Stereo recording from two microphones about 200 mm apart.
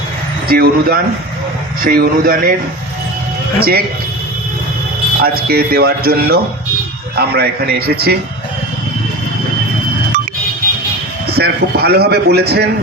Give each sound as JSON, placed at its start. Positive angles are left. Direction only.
{"t": 0.4, "sound": "a man's voice", "side_deg": -50}
{"t": 3.6, "sound": "a man's voice", "side_deg": -50}
{"t": 5.2, "sound": "a man's voice", "side_deg": -50}
{"t": 11.3, "sound": "a man's voice", "side_deg": -55}